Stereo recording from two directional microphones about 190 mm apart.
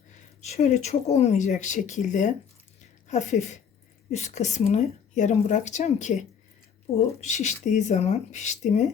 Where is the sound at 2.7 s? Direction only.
40° left (ahead or behind).